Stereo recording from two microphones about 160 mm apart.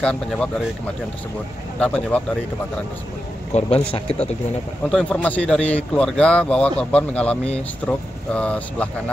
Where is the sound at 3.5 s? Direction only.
40° left (ahead or behind).